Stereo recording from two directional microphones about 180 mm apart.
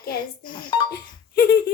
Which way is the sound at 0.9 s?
60° left (ahead or behind).